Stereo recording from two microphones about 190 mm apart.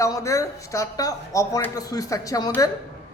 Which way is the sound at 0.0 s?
15° left (ahead or behind).